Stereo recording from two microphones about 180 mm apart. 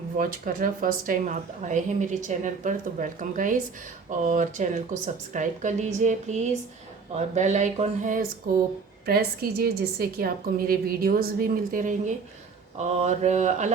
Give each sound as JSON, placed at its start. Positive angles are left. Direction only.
{"t": 0.2, "sound": "a woman's voice", "side_deg": -50}
{"t": 9.0, "sound": "a woman's voice", "side_deg": -60}